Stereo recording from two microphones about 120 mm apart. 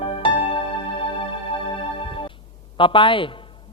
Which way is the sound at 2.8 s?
45° left (ahead or behind).